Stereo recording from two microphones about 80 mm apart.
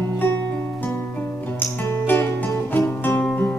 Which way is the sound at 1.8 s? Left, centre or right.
Left.